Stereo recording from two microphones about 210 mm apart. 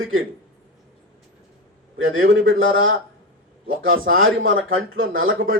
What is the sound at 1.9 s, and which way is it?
A man's voice, 70° right (ahead or behind).